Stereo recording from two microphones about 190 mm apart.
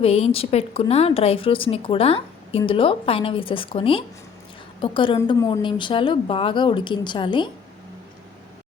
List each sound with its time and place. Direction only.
0.0 s a woman's voice: 30° left (ahead or behind)